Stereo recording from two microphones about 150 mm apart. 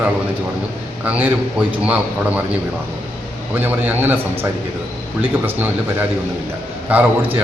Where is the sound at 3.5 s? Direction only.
10° right (ahead or behind).